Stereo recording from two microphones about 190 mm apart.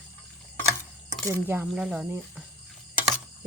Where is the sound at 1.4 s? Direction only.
10° right (ahead or behind).